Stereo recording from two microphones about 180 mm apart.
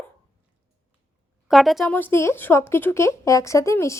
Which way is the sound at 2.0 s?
10° left (ahead or behind).